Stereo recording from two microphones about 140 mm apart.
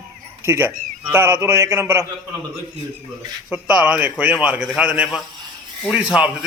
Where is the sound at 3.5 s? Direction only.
10° right (ahead or behind).